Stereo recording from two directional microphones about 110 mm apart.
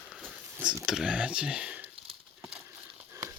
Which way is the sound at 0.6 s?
5° right (ahead or behind).